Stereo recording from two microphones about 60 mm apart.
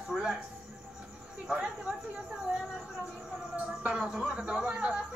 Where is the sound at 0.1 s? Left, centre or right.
Centre.